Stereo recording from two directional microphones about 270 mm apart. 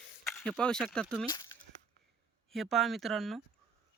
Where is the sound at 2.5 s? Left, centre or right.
Centre.